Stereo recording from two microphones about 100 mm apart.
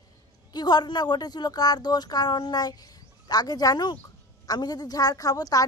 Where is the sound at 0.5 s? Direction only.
45° left (ahead or behind).